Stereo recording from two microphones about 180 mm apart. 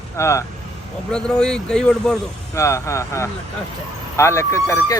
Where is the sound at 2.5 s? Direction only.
15° left (ahead or behind).